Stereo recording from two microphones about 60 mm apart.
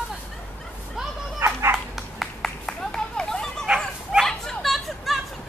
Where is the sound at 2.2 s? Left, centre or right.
Centre.